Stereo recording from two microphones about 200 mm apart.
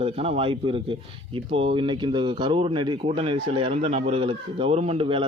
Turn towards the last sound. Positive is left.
turn(degrees=-25)  # may be behind; listen again after turning